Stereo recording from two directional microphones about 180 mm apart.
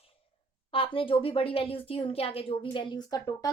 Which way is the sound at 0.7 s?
30° left (ahead or behind).